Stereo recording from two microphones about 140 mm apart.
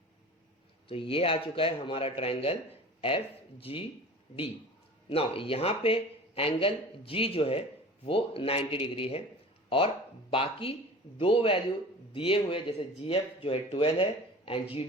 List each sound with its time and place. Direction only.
0.9 s speech: 40° left (ahead or behind)
3.6 s speech: 40° left (ahead or behind)
5.0 s speech: 40° left (ahead or behind)